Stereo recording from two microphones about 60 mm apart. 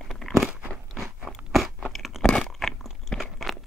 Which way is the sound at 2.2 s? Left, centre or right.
Centre.